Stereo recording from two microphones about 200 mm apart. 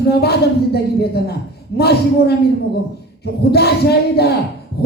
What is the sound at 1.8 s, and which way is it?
Speech, 55° left (ahead or behind).